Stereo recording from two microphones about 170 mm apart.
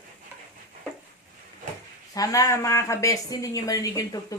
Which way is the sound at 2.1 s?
20° left (ahead or behind).